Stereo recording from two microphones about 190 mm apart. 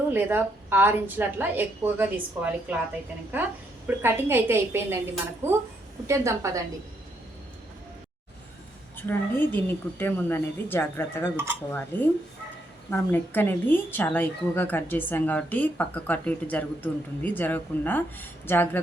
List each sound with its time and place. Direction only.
0.1 s a woman's voice: 10° right (ahead or behind)
3.8 s a woman's voice: 10° right (ahead or behind)
9.0 s a woman's voice: 10° left (ahead or behind)